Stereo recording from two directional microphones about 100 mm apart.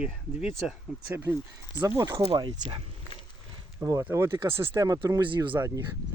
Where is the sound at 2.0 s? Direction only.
40° right (ahead or behind).